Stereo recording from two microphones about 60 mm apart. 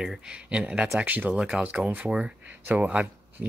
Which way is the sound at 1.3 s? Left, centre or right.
Centre.